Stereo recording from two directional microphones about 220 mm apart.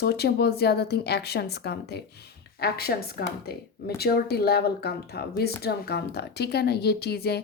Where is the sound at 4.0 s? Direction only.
45° left (ahead or behind).